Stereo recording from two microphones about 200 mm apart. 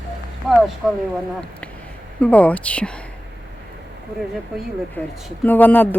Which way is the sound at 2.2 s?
5° left (ahead or behind).